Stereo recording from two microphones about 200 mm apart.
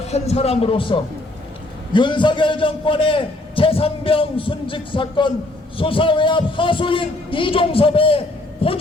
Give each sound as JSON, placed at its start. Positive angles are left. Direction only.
{"t": 0.1, "sound": "a man's voice", "side_deg": 30}